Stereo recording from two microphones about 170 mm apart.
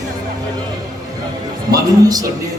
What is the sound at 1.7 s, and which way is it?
Speech, 20° right (ahead or behind).